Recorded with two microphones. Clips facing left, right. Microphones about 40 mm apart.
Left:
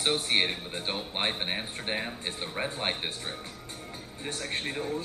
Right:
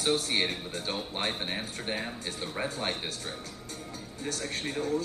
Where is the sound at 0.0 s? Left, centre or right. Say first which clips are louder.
Left 1 dB; left.